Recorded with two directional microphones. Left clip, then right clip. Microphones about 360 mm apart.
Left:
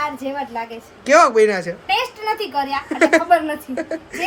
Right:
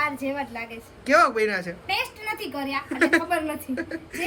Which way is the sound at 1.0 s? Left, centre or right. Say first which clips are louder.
Left 7 dB; centre.